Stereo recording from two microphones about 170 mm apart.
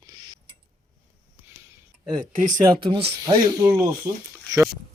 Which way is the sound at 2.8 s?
30° right (ahead or behind).